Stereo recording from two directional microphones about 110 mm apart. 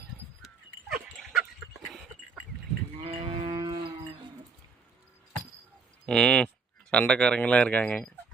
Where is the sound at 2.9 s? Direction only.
60° right (ahead or behind); by 3.8 s 45° right (ahead or behind).